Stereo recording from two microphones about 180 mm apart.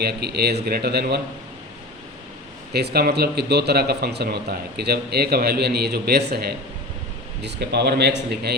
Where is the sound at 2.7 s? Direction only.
65° right (ahead or behind).